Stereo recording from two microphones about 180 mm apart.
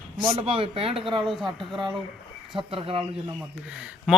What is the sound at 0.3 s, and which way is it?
Speech, 30° right (ahead or behind).